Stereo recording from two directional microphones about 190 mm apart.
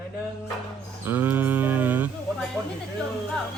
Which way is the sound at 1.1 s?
10° right (ahead or behind).